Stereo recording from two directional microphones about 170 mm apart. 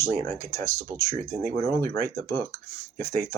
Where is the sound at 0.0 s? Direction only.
15° left (ahead or behind).